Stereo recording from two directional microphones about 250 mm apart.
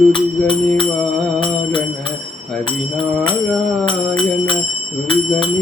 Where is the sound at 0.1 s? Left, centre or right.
Centre.